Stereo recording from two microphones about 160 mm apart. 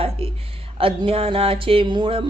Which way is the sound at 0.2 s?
35° right (ahead or behind).